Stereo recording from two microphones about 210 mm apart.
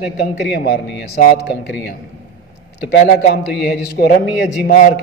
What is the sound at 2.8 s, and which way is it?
A man's voice, 50° left (ahead or behind).